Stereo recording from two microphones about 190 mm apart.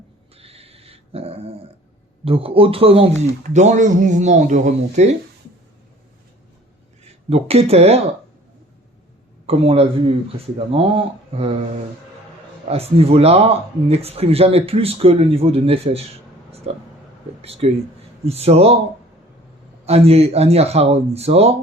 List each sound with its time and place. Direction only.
0.3 s dog: 30° right (ahead or behind)
2.2 s speech: 30° right (ahead or behind)
7.0 s speech: 30° right (ahead or behind)
9.5 s speech: 30° right (ahead or behind)
12.6 s speech: 30° right (ahead or behind)
19.8 s speech: 30° right (ahead or behind)